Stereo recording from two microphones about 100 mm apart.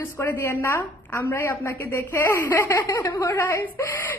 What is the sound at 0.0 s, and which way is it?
A woman's voice, 25° left (ahead or behind).